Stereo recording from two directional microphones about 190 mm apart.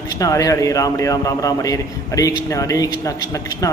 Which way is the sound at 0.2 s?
20° left (ahead or behind).